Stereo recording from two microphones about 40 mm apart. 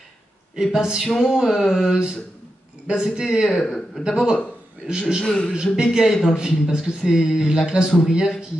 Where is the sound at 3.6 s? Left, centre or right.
Centre.